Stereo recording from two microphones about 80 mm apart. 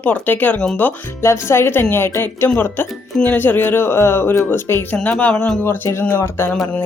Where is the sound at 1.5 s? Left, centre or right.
Left.